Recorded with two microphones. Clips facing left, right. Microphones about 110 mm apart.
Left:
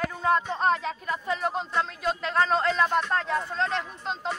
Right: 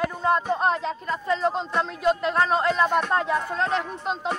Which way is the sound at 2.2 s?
5° right (ahead or behind).